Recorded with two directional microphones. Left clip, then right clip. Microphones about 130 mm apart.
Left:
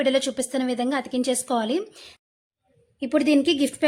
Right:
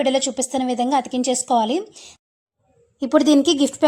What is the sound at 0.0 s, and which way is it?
A woman's voice, 5° right (ahead or behind).